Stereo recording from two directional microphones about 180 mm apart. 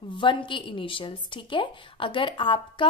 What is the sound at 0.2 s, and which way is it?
A woman's voice, 25° left (ahead or behind).